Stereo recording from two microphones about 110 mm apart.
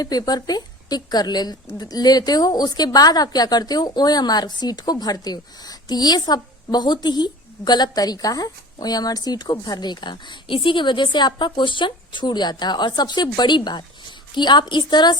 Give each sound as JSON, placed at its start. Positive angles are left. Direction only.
{"t": 0.0, "sound": "a woman's voice", "side_deg": 35}